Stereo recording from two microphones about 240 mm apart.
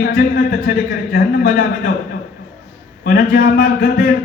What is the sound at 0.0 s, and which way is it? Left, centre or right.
Speech, left.